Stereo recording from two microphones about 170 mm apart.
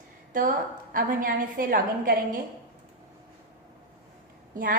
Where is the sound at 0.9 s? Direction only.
55° right (ahead or behind).